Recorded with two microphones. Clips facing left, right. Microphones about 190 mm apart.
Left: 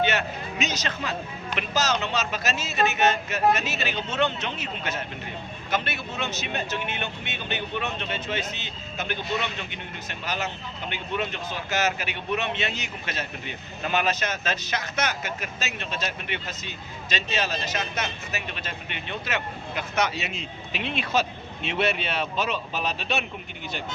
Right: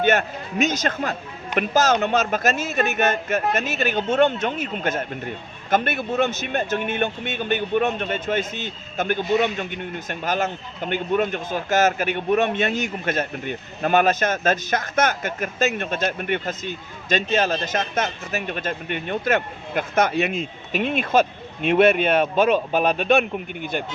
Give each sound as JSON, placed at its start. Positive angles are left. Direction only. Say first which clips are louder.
{"t": 0.0, "sound": "speech", "louder": "right 5 dB", "side_deg": -50}